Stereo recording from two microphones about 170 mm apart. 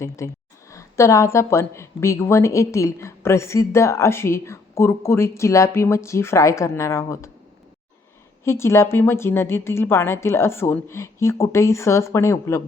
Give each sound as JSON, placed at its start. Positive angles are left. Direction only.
{"t": 0.2, "sound": "a woman's voice", "side_deg": 15}
{"t": 8.4, "sound": "a woman's voice", "side_deg": 15}